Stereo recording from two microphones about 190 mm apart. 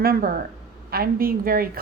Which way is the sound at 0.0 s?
50° right (ahead or behind).